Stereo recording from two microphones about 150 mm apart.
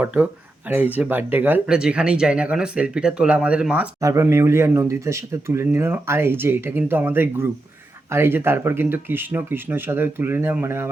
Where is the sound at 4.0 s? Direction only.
20° right (ahead or behind).